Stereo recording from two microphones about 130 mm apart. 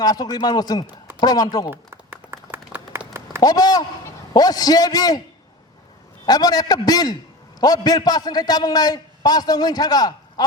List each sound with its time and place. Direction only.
0.0 s a man's voice: 30° left (ahead or behind)
1.7 s a sound: 20° right (ahead or behind)
3.4 s a man's voice: 30° left (ahead or behind)
6.2 s a man's voice: 30° left (ahead or behind)